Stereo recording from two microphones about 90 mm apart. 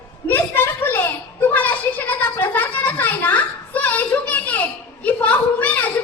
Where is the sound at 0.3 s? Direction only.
25° left (ahead or behind).